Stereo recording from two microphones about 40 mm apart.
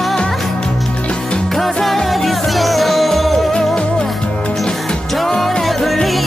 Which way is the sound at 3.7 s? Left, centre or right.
Centre.